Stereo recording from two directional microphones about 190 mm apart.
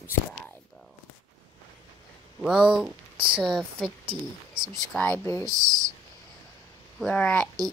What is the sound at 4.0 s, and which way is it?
Speech, 25° right (ahead or behind).